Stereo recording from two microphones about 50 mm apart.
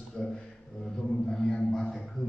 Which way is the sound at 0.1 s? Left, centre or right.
Centre.